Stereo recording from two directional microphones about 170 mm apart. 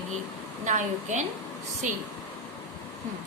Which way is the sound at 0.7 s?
45° right (ahead or behind).